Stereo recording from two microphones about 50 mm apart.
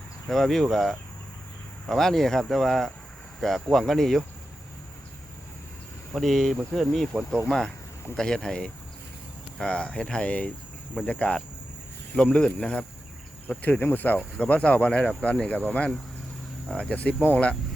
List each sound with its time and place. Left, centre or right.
0.3 s speech: centre
6.1 s speech: centre; by 12.8 s left
13.6 s speech: left
14.3 s speech: left
16.9 s speech: left